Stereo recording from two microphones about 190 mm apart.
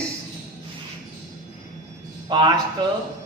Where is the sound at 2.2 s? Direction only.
20° right (ahead or behind).